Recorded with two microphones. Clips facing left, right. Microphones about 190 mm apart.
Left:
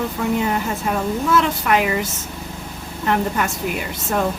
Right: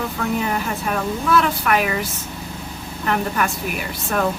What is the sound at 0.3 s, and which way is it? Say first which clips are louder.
Speech: left 2 dB; 25° left (ahead or behind).